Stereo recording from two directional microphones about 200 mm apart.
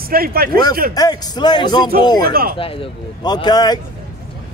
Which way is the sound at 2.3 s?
50° right (ahead or behind).